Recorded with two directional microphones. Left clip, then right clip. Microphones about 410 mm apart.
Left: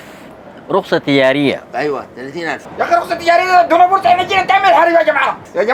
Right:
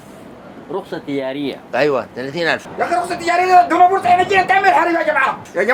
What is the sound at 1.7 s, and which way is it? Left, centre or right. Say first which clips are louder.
Speech: right 2 dB; right.